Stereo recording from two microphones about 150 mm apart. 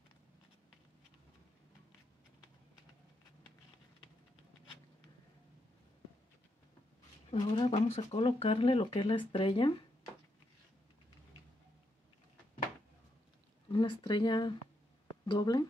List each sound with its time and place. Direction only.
7.2 s speech: 40° left (ahead or behind)
13.7 s speech: 30° left (ahead or behind)